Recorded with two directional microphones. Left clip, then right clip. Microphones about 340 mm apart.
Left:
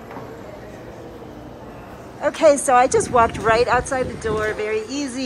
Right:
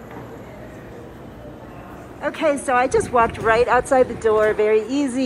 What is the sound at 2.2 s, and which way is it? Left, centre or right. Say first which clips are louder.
Speech: left 5 dB; centre.